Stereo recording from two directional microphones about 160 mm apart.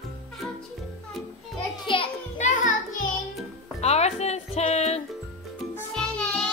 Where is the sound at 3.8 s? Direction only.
40° left (ahead or behind).